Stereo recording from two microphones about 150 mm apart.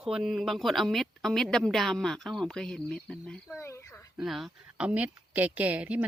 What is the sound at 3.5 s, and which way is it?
Speech, 20° left (ahead or behind).